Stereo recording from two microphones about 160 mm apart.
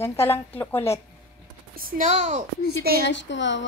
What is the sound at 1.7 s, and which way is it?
Speech, 65° right (ahead or behind).